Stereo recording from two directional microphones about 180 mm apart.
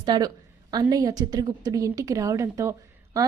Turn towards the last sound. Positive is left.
turn(degrees=-15)  # may be behind; listen again after turning